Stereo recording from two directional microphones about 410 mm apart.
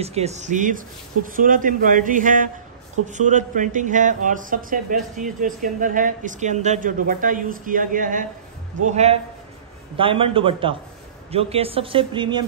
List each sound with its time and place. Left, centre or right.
0.0 s speech: centre